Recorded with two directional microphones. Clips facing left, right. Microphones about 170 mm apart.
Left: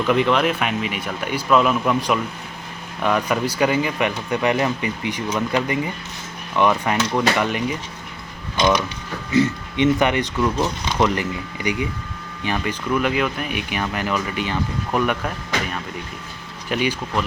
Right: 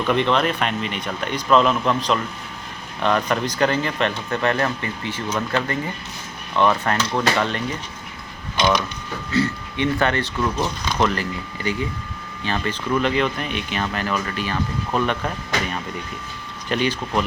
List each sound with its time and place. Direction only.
0.0 s speech: 5° left (ahead or behind)
9.3 s speech: 20° left (ahead or behind)
10.3 s speech: 5° left (ahead or behind)
11.0 s speech: 15° left (ahead or behind)
16.6 s speech: 5° left (ahead or behind)